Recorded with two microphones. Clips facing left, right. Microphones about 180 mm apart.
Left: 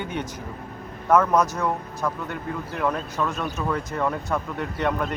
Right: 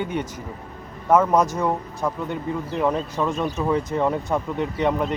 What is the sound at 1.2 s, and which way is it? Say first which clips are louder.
Speech: right 2 dB; 15° right (ahead or behind).